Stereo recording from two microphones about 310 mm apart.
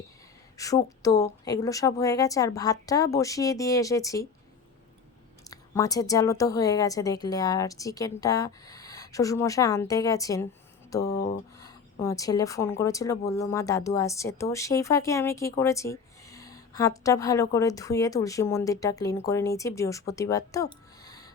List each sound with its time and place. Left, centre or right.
0.5 s speech: centre
5.5 s speech: centre
11.0 s speech: left
11.5 s speech: centre